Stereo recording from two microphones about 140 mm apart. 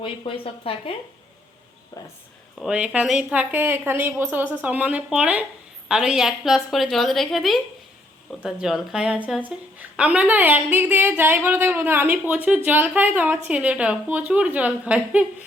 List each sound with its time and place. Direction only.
0.0 s speech: 40° left (ahead or behind)
2.6 s a woman's voice: 5° right (ahead or behind)